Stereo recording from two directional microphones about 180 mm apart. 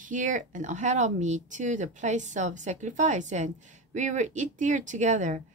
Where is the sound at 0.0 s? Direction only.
45° right (ahead or behind).